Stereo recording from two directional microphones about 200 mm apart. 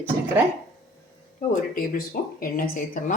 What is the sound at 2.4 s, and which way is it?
Speech, 45° left (ahead or behind).